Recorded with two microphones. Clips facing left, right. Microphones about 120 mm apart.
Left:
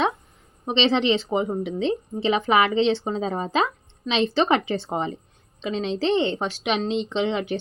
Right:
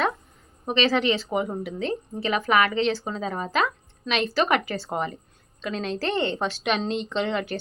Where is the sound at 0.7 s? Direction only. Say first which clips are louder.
Left 2 dB; 25° left (ahead or behind).